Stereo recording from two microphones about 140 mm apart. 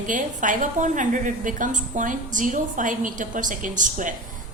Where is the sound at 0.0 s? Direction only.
65° right (ahead or behind).